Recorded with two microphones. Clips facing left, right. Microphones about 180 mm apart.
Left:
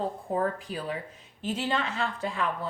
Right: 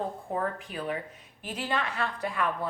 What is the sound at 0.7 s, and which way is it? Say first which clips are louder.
A woman's voice: even; 35° left (ahead or behind).